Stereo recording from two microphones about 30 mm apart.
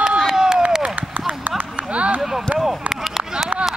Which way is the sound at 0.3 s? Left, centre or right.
Centre.